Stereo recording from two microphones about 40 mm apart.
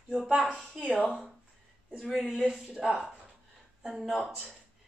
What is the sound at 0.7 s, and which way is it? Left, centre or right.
Speech, right.